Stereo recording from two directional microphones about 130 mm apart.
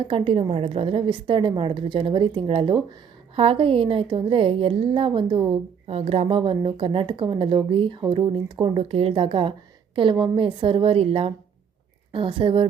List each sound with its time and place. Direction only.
0.0 s a woman's voice: 40° right (ahead or behind)
5.9 s a woman's voice: 50° right (ahead or behind)